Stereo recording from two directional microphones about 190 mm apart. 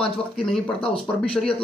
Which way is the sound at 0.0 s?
5° left (ahead or behind).